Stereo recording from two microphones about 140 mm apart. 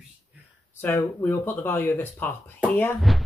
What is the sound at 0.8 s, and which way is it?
Speech, 15° left (ahead or behind).